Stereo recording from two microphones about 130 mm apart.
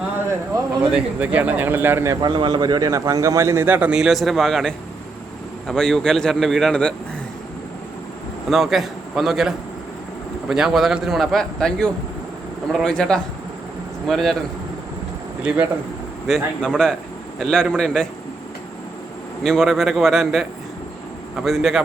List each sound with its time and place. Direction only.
0.3 s a sound: 20° right (ahead or behind)
0.9 s speech: 10° right (ahead or behind)
2.2 s a man's voice: 35° right (ahead or behind); by 6.9 s 5° left (ahead or behind)
8.4 s a man's voice: centre (ahead or behind)
15.4 s speech: 10° right (ahead or behind)
16.2 s a man's voice: 5° left (ahead or behind)
19.4 s a man's voice: 5° left (ahead or behind)
21.4 s a man's voice: centre (ahead or behind)